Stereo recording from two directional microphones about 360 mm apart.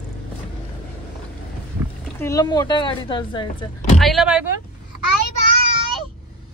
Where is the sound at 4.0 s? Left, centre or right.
Centre.